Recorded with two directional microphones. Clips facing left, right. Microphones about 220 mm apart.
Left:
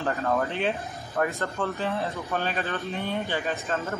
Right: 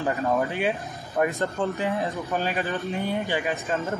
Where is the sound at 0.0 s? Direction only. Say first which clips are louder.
Right 2 dB; 15° right (ahead or behind).